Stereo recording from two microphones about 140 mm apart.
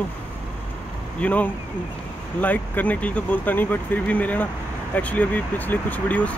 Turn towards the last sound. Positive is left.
turn(degrees=10)  # may be behind; listen again after turning